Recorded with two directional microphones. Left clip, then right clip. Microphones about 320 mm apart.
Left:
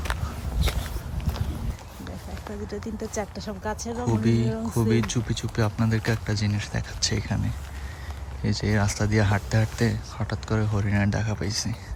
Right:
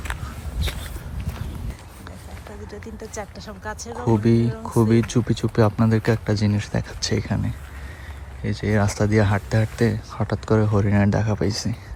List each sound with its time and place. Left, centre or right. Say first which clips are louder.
2.6 s speech: left 3 dB; left
4.0 s speech: right 6 dB; centre